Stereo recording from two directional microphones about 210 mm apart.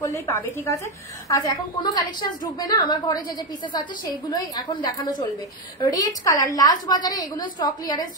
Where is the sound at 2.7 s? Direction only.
20° left (ahead or behind).